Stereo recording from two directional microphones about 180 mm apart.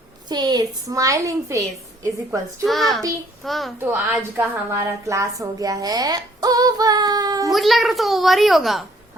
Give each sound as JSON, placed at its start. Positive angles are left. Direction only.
{"t": 0.3, "sound": "a woman's voice", "side_deg": -20}
{"t": 2.6, "sound": "a child's voice", "side_deg": 0}
{"t": 3.8, "sound": "a woman's voice", "side_deg": -10}
{"t": 7.5, "sound": "a child's voice", "side_deg": 0}